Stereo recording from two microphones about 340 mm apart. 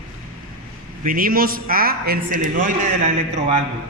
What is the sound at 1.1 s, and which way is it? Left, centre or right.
A man's voice, right.